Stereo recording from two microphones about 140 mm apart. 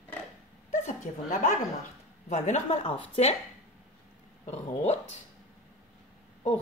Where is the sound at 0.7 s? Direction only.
60° left (ahead or behind).